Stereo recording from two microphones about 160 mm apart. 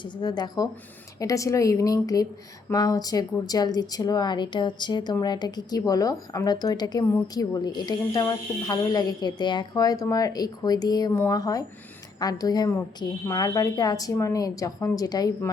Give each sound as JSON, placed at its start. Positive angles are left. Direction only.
{"t": 0.0, "sound": "a woman's voice", "side_deg": 25}